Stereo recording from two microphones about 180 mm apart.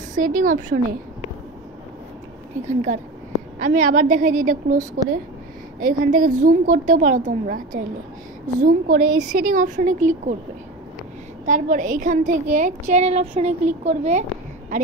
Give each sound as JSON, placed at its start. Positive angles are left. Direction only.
{"t": 0.1, "sound": "a woman's voice", "side_deg": -45}
{"t": 2.6, "sound": "a woman's voice", "side_deg": -40}
{"t": 11.4, "sound": "a woman's voice", "side_deg": -45}